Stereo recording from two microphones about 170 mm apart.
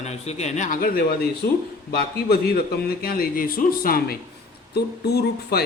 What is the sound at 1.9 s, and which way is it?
A man's voice, 65° left (ahead or behind).